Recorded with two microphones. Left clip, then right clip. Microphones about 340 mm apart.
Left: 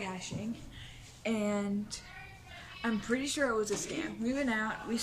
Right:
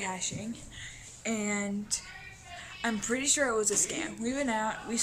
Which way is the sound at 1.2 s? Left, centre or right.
Centre.